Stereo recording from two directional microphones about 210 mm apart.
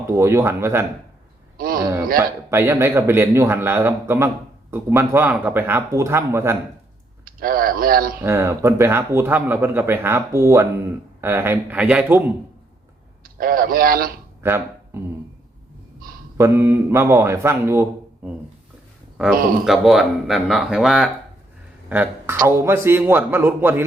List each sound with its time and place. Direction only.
0.2 s speech: 15° right (ahead or behind)
1.5 s a sound: 45° right (ahead or behind)
2.1 s speech: 10° right (ahead or behind)
7.3 s speech: 45° right (ahead or behind)
8.2 s speech: 10° right (ahead or behind)
13.2 s a man's voice: 45° right (ahead or behind)
14.4 s speech: 10° right (ahead or behind)
16.4 s speech: 10° right (ahead or behind)